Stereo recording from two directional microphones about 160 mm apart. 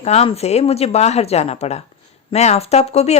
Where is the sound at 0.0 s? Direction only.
40° left (ahead or behind).